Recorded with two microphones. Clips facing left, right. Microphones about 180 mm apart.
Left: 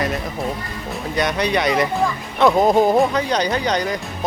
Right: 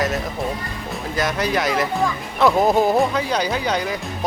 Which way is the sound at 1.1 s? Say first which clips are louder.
Left 2 dB; centre (ahead or behind).